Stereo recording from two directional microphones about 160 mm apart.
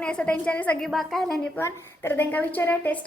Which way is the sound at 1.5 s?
15° left (ahead or behind).